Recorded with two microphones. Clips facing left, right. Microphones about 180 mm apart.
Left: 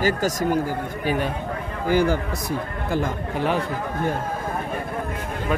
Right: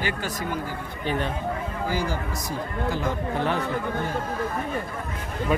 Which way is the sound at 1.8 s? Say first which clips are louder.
Left 9 dB; 60° left (ahead or behind).